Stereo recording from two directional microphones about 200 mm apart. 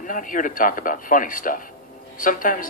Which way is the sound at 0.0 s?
40° left (ahead or behind).